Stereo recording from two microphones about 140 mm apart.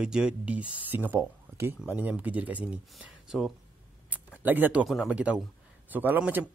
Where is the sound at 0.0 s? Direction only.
5° right (ahead or behind).